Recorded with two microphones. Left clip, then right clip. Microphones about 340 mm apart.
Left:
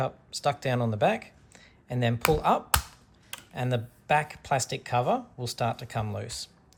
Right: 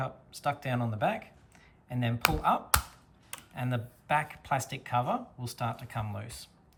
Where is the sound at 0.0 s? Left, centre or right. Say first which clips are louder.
Left 5 dB; centre.